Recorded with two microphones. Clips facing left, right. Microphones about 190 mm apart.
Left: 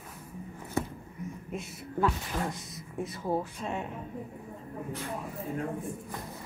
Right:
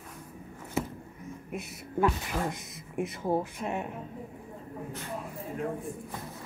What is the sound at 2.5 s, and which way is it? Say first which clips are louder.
Speech: right 3 dB; 20° right (ahead or behind).